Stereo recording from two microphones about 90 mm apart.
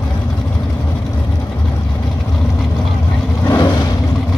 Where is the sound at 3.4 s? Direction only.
45° left (ahead or behind).